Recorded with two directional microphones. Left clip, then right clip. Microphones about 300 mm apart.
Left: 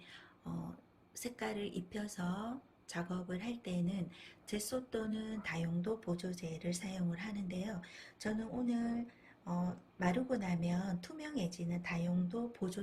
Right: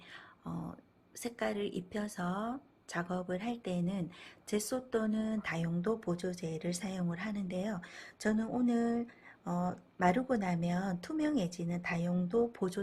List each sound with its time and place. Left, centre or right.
1.2 s speech: centre